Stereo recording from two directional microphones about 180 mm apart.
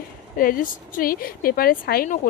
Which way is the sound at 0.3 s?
50° left (ahead or behind).